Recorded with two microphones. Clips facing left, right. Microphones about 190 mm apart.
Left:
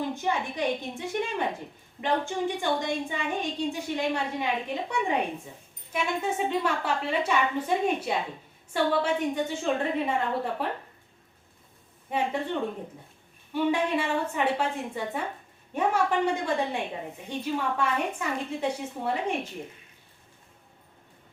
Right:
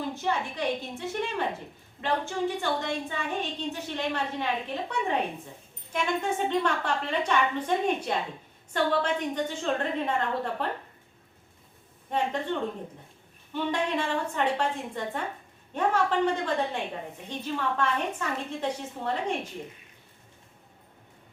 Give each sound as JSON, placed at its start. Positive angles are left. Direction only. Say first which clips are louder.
{"t": 0.1, "sound": "a woman's voice", "louder": "left 1 dB", "side_deg": 15}
{"t": 12.1, "sound": "a woman's voice", "louder": "even", "side_deg": 10}
{"t": 13.5, "sound": "a woman's voice", "louder": "left 3 dB", "side_deg": 10}